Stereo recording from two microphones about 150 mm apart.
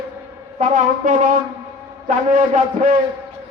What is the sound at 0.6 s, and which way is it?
Speech, 60° right (ahead or behind).